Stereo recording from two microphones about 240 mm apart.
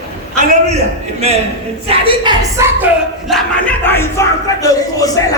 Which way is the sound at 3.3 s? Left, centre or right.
Centre.